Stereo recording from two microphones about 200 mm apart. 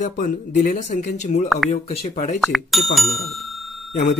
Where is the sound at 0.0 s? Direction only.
40° left (ahead or behind).